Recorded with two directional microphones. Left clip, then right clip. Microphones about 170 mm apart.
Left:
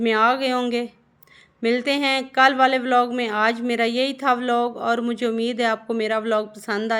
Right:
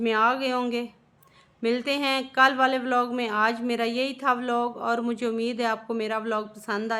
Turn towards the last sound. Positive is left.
turn(degrees=20)  # may be behind; listen again after turning